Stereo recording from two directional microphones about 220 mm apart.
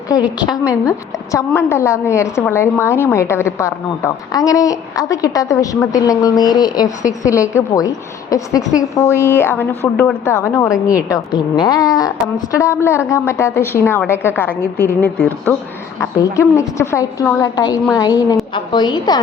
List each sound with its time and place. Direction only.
0.1 s a woman's voice: 15° left (ahead or behind)